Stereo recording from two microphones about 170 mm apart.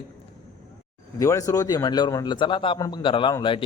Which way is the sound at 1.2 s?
20° left (ahead or behind).